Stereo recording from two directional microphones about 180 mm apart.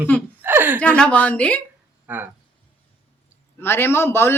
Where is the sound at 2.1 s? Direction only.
10° right (ahead or behind).